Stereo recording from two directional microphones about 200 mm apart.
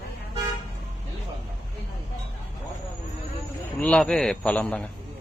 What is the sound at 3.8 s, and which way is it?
A man's voice, 5° left (ahead or behind).